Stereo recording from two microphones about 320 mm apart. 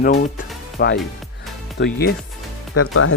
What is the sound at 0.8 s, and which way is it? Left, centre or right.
Speech, left.